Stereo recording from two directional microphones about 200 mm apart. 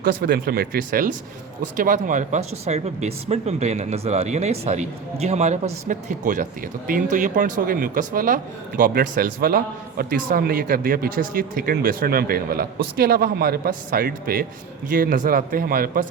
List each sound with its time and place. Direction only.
0.0 s a man's voice: 55° right (ahead or behind)